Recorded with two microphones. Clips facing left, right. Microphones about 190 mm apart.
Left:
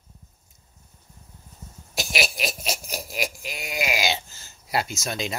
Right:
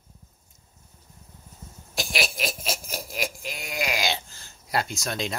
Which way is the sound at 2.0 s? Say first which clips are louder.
Left 1 dB; centre (ahead or behind).